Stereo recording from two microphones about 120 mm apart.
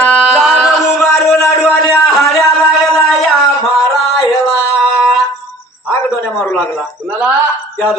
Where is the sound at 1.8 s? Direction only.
30° left (ahead or behind).